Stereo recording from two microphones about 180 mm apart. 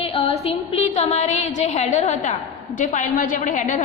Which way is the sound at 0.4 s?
35° left (ahead or behind).